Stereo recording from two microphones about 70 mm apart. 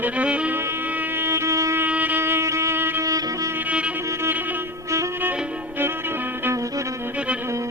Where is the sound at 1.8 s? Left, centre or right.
Right.